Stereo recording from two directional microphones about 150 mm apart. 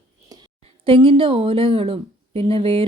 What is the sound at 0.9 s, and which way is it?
A woman's voice, 35° right (ahead or behind).